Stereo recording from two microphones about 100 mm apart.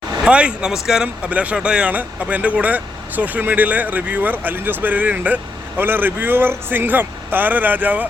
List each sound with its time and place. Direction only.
0.3 s speech: 10° right (ahead or behind)